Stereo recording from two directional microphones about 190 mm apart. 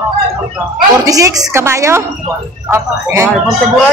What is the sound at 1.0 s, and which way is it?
A woman's voice, 20° right (ahead or behind).